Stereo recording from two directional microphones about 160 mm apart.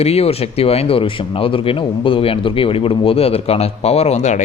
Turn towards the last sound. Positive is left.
turn(degrees=45)  # may be behind; listen again after turning